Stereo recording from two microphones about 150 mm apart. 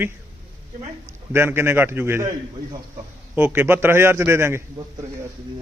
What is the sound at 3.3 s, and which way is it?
Speech, 15° right (ahead or behind).